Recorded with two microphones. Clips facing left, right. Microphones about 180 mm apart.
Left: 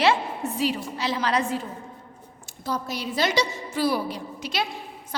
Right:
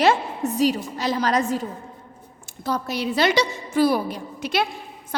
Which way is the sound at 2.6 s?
65° right (ahead or behind).